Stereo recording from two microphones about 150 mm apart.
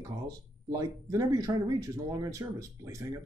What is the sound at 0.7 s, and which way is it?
Speech, 20° right (ahead or behind).